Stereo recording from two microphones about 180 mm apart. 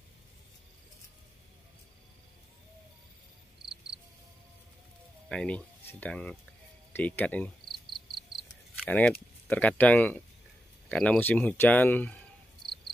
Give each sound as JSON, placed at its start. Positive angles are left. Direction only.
{"t": 5.3, "sound": "speech", "side_deg": 5}
{"t": 6.9, "sound": "cricket", "side_deg": 10}
{"t": 8.2, "sound": "a sound", "side_deg": 0}
{"t": 9.5, "sound": "speech", "side_deg": 10}